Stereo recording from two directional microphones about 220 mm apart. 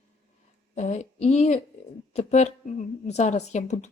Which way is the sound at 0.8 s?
30° left (ahead or behind).